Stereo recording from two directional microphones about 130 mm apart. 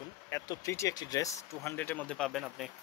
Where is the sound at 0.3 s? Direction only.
20° left (ahead or behind).